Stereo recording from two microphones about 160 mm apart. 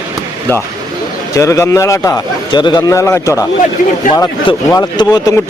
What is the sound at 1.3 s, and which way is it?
A man's voice, 20° left (ahead or behind).